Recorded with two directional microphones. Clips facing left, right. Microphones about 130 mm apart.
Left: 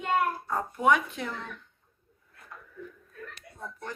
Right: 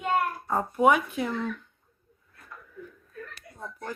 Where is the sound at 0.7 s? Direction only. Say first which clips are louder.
Right 3 dB; 10° right (ahead or behind).